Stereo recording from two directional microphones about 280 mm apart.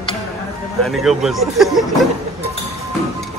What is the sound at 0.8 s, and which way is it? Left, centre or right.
Speech, centre.